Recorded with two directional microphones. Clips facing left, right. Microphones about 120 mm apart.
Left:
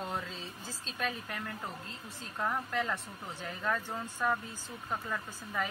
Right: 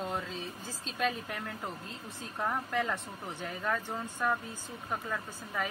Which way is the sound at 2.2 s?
15° right (ahead or behind).